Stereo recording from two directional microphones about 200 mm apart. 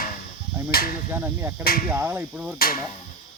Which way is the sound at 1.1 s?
10° right (ahead or behind).